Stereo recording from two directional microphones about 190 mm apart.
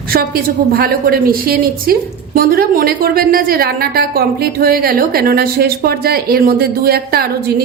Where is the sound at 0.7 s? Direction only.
55° right (ahead or behind).